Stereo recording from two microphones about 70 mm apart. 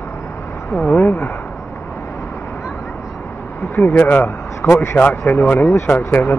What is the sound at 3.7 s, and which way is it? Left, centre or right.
Speech, left.